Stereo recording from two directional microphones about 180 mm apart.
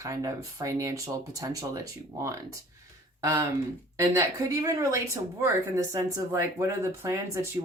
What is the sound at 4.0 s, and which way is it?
Speech, 20° right (ahead or behind).